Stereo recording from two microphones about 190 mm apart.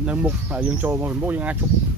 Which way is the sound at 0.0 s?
5° right (ahead or behind).